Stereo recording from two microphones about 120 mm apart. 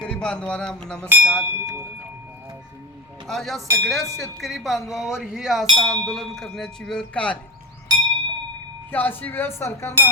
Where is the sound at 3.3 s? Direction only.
Centre (ahead or behind).